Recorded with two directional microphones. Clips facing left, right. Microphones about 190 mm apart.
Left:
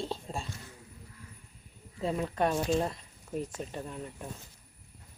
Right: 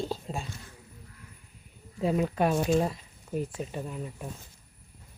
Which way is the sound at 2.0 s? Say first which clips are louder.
Right 4 dB; 5° right (ahead or behind).